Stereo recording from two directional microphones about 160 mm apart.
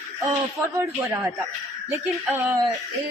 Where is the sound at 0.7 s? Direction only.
10° right (ahead or behind).